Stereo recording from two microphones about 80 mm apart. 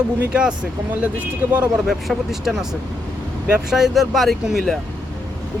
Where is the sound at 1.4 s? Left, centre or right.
Right.